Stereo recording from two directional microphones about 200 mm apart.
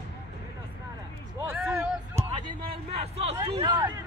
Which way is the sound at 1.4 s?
10° right (ahead or behind).